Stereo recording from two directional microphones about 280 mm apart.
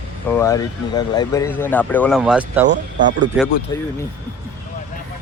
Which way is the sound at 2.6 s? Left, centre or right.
Right.